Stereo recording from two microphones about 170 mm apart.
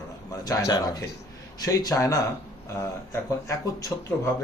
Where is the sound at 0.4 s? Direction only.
20° left (ahead or behind).